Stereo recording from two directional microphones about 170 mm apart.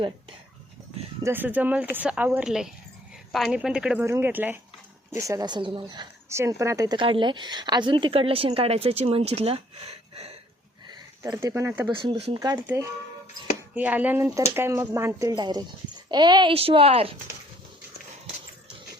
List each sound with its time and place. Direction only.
1.2 s a woman's voice: 10° right (ahead or behind); by 10.3 s 35° right (ahead or behind)
11.2 s speech: 20° right (ahead or behind)
11.9 s a child's voice: 30° right (ahead or behind)